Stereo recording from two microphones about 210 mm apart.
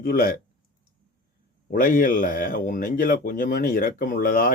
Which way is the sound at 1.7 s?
40° left (ahead or behind).